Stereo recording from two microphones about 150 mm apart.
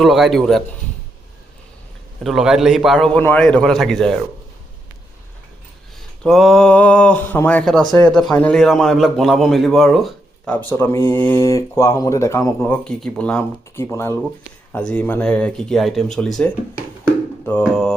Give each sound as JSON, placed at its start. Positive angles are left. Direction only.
{"t": 0.0, "sound": "a man's voice", "side_deg": 0}
{"t": 2.2, "sound": "a man's voice", "side_deg": 0}
{"t": 6.2, "sound": "a man's voice", "side_deg": 0}
{"t": 12.7, "sound": "speech", "side_deg": 5}
{"t": 17.7, "sound": "a man's voice", "side_deg": 5}